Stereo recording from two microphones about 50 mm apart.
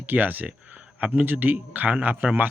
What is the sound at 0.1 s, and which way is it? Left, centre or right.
A man's voice, right.